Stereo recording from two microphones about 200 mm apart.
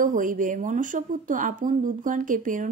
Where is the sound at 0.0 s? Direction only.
40° right (ahead or behind).